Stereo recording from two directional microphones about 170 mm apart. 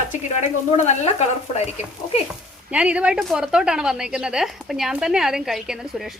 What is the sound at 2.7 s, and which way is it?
A woman's voice, 5° right (ahead or behind).